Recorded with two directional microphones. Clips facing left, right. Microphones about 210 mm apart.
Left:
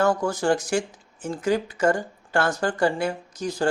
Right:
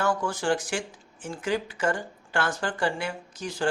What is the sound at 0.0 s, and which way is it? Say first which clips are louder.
Speech: left 5 dB; 40° left (ahead or behind).